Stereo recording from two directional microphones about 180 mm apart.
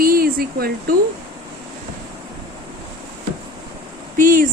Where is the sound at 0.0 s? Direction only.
55° right (ahead or behind).